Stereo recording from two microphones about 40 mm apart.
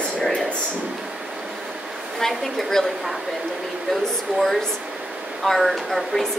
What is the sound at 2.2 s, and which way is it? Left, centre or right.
Speech, centre.